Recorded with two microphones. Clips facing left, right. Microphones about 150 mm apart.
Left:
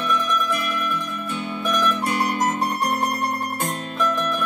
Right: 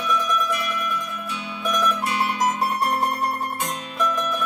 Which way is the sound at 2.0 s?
50° left (ahead or behind).